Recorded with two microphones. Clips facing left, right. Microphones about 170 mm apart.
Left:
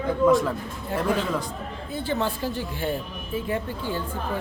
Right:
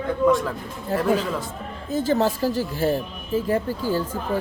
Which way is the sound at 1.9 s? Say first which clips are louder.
Right 6 dB; 40° right (ahead or behind).